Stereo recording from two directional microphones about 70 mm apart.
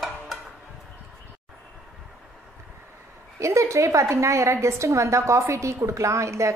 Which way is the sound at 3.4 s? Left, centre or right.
Right.